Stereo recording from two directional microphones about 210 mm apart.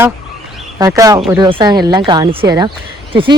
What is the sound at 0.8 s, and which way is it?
A man's voice, 15° right (ahead or behind).